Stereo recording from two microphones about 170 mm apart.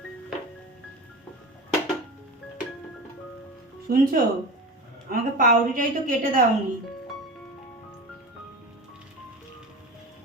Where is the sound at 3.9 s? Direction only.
60° right (ahead or behind).